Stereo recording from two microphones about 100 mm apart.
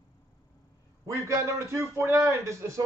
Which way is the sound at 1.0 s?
30° right (ahead or behind).